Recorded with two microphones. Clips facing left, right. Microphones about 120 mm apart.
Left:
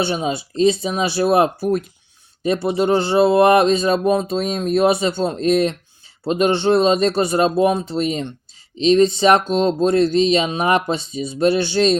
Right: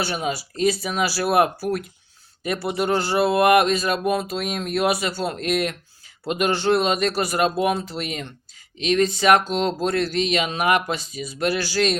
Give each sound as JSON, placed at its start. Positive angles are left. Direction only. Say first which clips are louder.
{"t": 0.0, "sound": "speech", "louder": "left 5 dB", "side_deg": 25}